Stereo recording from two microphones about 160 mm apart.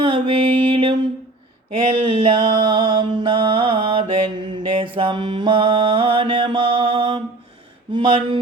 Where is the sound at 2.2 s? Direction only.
30° right (ahead or behind).